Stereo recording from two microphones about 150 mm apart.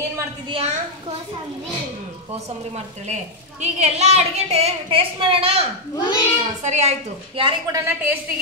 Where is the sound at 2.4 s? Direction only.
50° right (ahead or behind).